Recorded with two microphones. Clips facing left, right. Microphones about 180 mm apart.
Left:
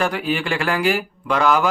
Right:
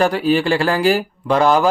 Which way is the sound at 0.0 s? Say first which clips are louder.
Right 6 dB; 35° right (ahead or behind).